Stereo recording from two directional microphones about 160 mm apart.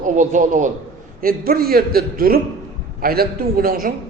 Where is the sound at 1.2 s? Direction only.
65° right (ahead or behind).